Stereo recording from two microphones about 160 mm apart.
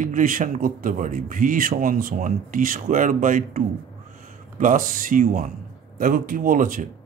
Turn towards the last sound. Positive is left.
turn(degrees=-60)  # may be behind; listen again after turning